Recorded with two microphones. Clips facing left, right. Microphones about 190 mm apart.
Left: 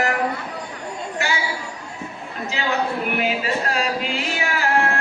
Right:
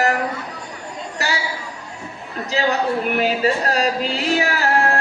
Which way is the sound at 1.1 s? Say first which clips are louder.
Right 1 dB; 35° right (ahead or behind).